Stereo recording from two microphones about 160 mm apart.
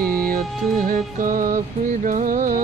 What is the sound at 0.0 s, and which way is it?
Music, 65° right (ahead or behind).